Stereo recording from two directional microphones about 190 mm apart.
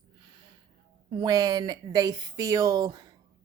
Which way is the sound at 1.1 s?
20° right (ahead or behind).